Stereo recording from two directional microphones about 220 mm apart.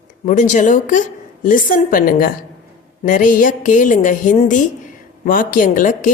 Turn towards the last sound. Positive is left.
turn(degrees=35)  # may be behind; listen again after turning